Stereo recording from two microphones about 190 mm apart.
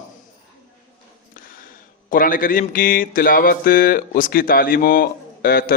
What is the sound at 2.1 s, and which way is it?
Mantra, 45° left (ahead or behind).